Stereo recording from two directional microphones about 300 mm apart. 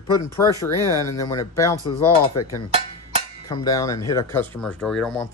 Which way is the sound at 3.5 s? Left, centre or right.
Centre.